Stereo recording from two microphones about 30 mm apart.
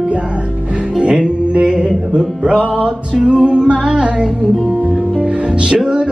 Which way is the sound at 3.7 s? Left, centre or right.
Right.